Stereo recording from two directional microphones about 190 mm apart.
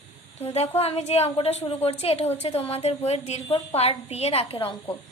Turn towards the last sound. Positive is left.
turn(degrees=30)  # may be behind; listen again after turning